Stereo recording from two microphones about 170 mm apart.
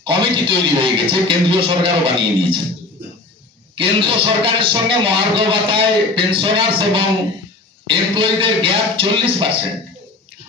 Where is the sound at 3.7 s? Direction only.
30° right (ahead or behind).